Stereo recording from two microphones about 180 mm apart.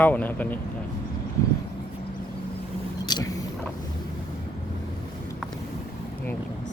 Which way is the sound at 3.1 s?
20° left (ahead or behind).